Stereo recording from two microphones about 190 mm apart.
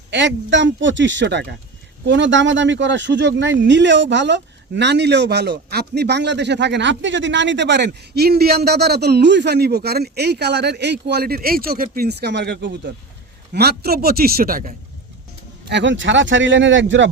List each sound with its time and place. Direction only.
0.1 s speech: 70° right (ahead or behind); by 14.7 s 50° right (ahead or behind)
15.7 s speech: 75° right (ahead or behind)